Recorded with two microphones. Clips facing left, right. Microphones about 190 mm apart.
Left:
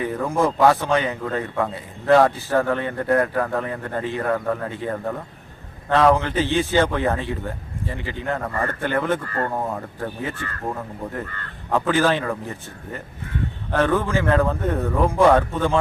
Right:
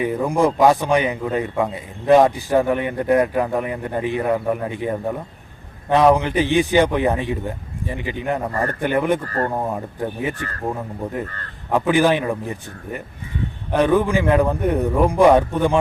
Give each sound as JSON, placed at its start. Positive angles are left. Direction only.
{"t": 0.0, "sound": "a man's voice", "side_deg": -15}
{"t": 9.2, "sound": "speech", "side_deg": -35}
{"t": 9.5, "sound": "a man's voice", "side_deg": -15}